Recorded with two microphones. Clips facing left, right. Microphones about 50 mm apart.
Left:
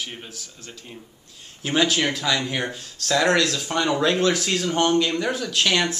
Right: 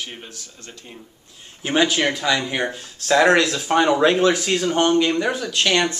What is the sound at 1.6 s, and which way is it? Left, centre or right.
Speech, centre.